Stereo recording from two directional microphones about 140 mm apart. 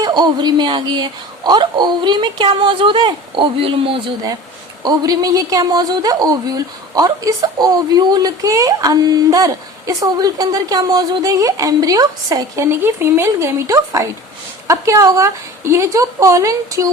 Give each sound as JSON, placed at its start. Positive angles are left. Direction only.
{"t": 0.0, "sound": "a woman's voice", "side_deg": -30}
{"t": 4.8, "sound": "a woman's voice", "side_deg": -30}